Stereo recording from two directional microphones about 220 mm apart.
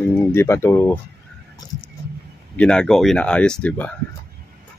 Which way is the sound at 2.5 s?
5° left (ahead or behind).